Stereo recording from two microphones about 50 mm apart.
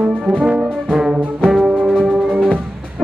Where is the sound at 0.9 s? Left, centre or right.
Centre.